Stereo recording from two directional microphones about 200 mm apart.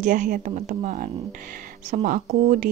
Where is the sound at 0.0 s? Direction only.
40° right (ahead or behind).